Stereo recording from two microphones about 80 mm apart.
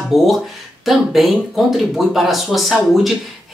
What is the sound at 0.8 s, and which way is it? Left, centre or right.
Speech, centre.